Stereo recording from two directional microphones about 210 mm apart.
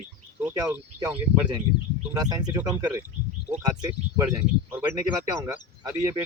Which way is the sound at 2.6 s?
15° right (ahead or behind).